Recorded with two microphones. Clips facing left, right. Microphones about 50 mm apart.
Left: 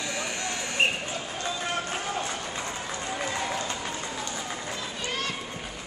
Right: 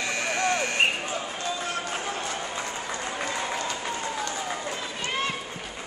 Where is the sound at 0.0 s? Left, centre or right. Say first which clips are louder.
Right 5 dB; right.